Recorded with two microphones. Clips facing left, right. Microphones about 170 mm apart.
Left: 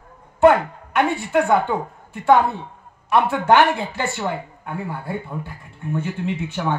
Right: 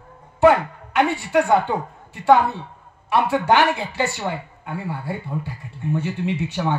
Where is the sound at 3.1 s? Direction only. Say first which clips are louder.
Left 2 dB; 50° left (ahead or behind).